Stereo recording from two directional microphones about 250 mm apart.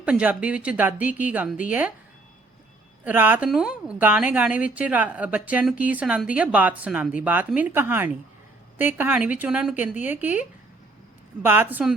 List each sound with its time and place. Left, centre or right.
0.0 s a woman's voice: centre
3.0 s a woman's voice: centre
11.4 s speech: centre